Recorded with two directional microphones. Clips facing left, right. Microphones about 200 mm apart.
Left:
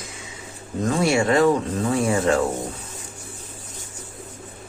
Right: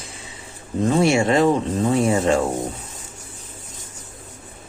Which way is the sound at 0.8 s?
25° right (ahead or behind).